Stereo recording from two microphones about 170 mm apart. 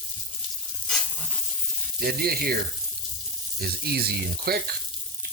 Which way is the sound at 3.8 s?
70° right (ahead or behind).